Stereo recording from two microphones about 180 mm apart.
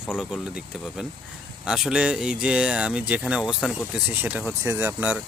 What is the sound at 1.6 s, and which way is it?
Speech, 5° right (ahead or behind).